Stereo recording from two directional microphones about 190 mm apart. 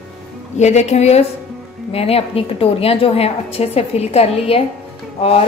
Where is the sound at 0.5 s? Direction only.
35° left (ahead or behind).